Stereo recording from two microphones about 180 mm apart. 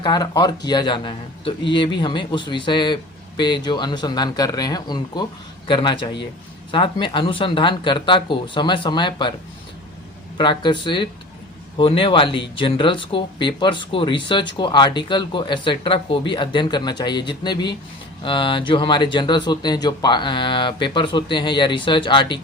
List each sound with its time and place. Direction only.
0.0 s speech: 25° left (ahead or behind)
10.3 s speech: 25° left (ahead or behind)